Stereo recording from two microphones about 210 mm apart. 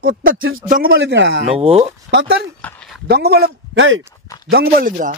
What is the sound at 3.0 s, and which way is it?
Speech, 50° right (ahead or behind).